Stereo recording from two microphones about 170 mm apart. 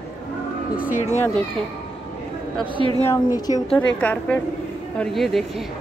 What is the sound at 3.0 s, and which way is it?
A woman's voice, 20° left (ahead or behind).